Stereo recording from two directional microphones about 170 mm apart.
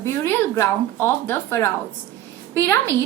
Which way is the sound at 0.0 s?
15° left (ahead or behind).